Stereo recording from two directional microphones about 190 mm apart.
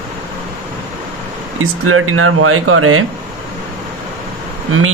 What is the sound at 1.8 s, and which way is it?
Speech, 90° right.